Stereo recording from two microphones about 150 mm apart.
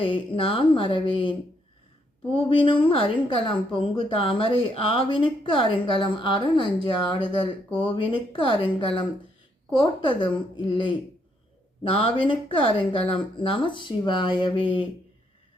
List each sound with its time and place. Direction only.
0.0 s a woman's voice: 35° left (ahead or behind)
2.6 s a woman's voice: 35° left (ahead or behind)